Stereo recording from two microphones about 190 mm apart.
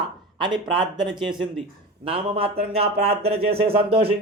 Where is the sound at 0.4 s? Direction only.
25° right (ahead or behind).